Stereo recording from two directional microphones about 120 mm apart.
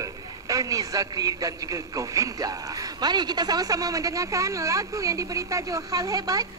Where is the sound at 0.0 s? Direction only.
30° right (ahead or behind).